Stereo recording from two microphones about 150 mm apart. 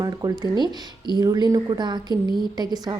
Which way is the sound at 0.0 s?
25° right (ahead or behind).